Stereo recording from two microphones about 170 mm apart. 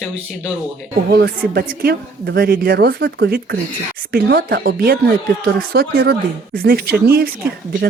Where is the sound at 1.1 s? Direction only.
65° right (ahead or behind); by 3.6 s 80° right.